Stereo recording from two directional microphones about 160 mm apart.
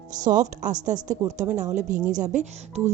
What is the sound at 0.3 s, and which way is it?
Speech, 50° right (ahead or behind).